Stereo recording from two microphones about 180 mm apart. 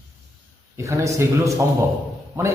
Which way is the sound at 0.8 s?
15° right (ahead or behind).